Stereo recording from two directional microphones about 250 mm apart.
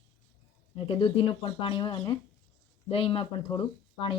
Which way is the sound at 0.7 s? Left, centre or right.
Left.